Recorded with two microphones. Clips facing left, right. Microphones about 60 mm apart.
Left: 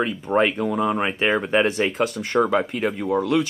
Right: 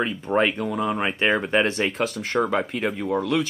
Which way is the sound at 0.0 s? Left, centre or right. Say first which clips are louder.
Left 2 dB; centre.